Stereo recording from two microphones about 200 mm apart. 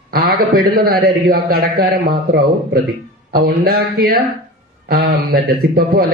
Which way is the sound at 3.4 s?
50° right (ahead or behind).